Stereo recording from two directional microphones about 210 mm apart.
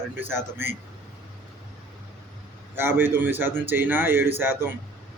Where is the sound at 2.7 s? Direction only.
10° right (ahead or behind).